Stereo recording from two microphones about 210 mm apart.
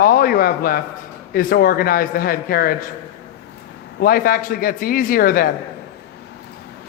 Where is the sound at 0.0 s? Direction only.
45° left (ahead or behind).